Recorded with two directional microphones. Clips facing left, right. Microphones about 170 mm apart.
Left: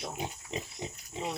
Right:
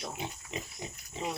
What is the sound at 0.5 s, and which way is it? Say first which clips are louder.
Pig: left 3 dB; 35° left (ahead or behind).